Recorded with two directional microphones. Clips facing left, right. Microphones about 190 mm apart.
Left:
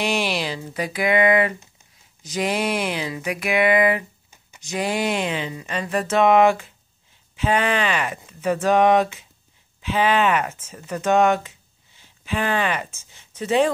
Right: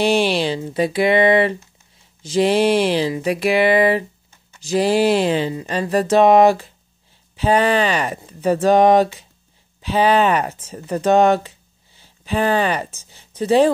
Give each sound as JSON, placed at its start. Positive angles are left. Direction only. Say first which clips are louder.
{"t": 0.0, "sound": "speech", "louder": "right 7 dB", "side_deg": -30}